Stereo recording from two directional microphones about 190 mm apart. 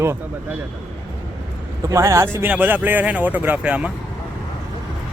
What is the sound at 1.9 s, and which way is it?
Speech, 15° right (ahead or behind).